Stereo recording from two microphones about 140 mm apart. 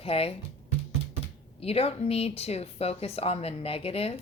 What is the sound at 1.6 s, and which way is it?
Speech, 45° left (ahead or behind).